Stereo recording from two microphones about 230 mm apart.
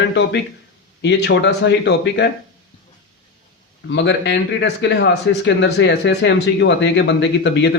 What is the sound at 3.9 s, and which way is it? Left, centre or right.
Speech, left.